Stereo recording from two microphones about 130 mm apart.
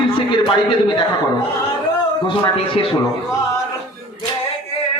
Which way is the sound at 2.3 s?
40° left (ahead or behind).